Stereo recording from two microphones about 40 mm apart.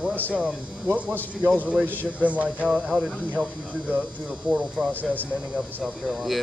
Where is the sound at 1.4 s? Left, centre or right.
Right.